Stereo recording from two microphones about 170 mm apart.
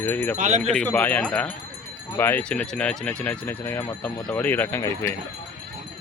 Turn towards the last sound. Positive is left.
turn(degrees=15)  # may be behind; listen again after turning